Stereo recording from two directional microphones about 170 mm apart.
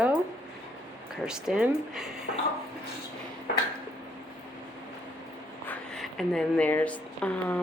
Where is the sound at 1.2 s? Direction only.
5° right (ahead or behind).